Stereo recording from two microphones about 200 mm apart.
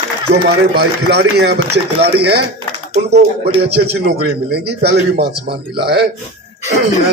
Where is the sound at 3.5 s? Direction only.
55° right (ahead or behind).